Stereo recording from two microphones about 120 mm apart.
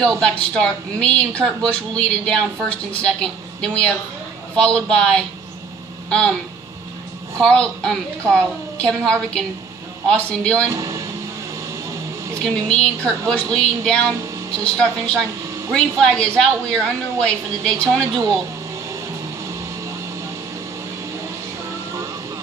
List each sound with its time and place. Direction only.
0.0 s a woman's voice: 5° left (ahead or behind)
7.3 s a woman's voice: 5° left (ahead or behind)
10.7 s speech: 25° right (ahead or behind)
12.4 s a woman's voice: 5° left (ahead or behind)